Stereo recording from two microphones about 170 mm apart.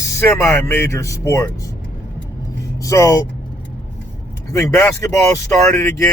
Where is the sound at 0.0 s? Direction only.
15° left (ahead or behind).